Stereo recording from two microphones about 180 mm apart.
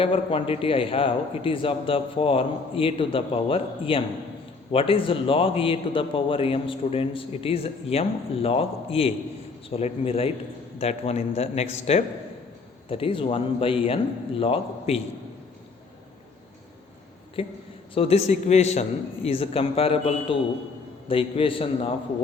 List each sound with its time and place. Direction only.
0.0 s a man's voice: 30° left (ahead or behind)
17.4 s a man's voice: 30° left (ahead or behind)